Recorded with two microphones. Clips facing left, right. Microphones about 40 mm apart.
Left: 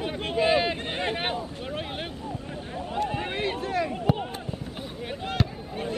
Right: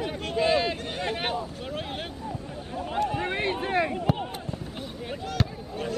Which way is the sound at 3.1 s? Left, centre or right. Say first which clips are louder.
Right 2 dB; centre.